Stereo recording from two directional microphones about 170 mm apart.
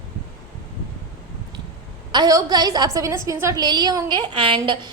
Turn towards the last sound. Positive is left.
turn(degrees=-30)  # may be behind; listen again after turning